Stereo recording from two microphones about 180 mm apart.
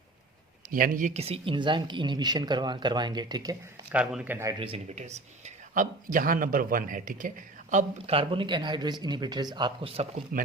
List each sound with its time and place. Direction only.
0.7 s speech: 50° right (ahead or behind); by 3.6 s 20° right (ahead or behind)
3.9 s a man's voice: 5° right (ahead or behind)
4.6 s speech: 35° right (ahead or behind)